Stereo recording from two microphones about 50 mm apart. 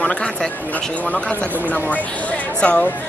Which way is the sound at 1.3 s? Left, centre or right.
Right.